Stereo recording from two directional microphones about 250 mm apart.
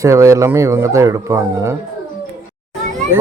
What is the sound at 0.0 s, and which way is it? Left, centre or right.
Speech, centre.